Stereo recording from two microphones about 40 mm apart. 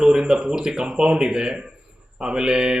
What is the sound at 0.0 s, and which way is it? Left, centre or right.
Speech, centre.